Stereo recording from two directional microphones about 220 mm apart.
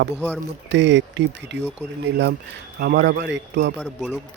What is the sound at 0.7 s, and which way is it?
Speech, 55° right (ahead or behind).